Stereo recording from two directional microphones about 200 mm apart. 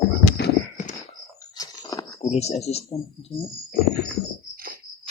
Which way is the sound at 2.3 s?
30° left (ahead or behind).